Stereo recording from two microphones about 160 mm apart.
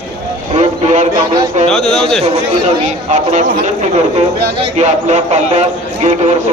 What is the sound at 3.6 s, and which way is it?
Speech, 45° right (ahead or behind).